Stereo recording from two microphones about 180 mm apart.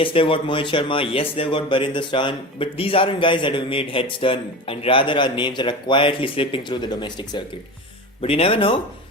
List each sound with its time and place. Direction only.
0.0 s speech: 30° left (ahead or behind)